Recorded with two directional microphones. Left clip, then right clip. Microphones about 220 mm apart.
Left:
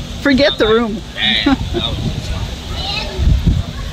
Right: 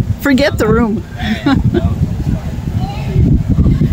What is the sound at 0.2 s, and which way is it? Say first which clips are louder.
Speech: even; 30° right (ahead or behind).